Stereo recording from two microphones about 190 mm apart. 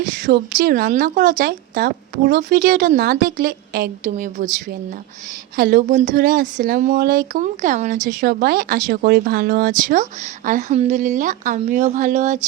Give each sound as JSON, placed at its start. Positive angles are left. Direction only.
{"t": 0.3, "sound": "speech", "side_deg": -50}
{"t": 2.4, "sound": "speech", "side_deg": -45}
{"t": 5.5, "sound": "speech", "side_deg": -50}